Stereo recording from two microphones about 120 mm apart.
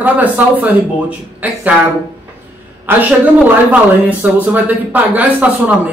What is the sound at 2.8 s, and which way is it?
Speech, 15° right (ahead or behind).